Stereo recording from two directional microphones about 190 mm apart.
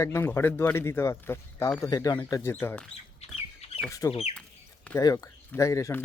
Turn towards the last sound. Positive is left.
turn(degrees=15)  # may be behind; listen again after turning